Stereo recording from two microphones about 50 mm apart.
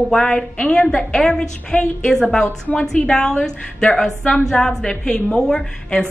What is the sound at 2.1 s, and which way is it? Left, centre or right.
Speech, centre.